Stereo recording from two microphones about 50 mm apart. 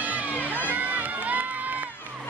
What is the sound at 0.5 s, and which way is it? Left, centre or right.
Run, right.